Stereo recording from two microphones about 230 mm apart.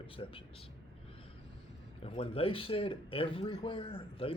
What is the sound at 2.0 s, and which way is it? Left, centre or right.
Speech, left.